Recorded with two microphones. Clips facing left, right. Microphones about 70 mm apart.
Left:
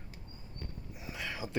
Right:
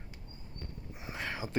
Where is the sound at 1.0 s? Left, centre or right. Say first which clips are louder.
Right 2 dB; right.